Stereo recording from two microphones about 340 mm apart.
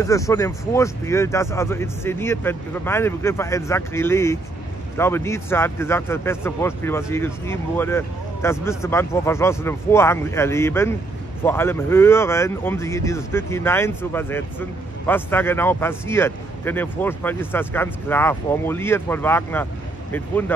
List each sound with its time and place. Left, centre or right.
0.0 s speech: centre